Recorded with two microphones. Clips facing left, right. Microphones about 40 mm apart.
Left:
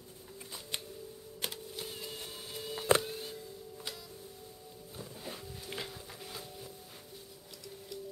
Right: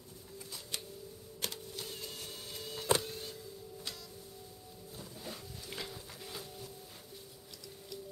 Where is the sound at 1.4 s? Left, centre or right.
Centre.